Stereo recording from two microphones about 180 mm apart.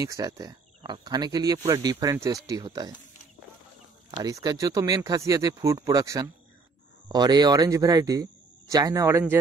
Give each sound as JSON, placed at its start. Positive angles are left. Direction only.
{"t": 0.0, "sound": "speech", "side_deg": -20}
{"t": 4.2, "sound": "speech", "side_deg": -20}